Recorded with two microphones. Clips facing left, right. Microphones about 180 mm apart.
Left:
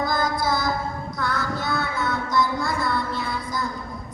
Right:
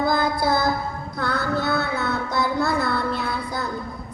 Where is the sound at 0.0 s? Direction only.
65° right (ahead or behind).